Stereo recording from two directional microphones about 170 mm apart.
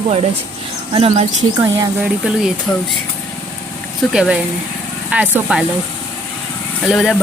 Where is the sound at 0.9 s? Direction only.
35° right (ahead or behind).